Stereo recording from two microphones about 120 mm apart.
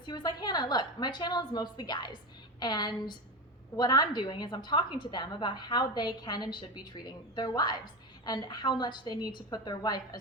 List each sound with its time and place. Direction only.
0.0 s a woman's voice: 35° left (ahead or behind)